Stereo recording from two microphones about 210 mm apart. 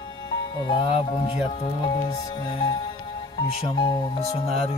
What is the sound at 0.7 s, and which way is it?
Speech, 25° left (ahead or behind).